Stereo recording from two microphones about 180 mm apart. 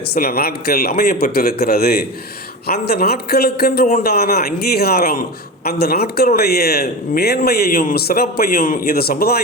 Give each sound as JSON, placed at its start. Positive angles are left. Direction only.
{"t": 0.1, "sound": "a man's voice", "side_deg": 55}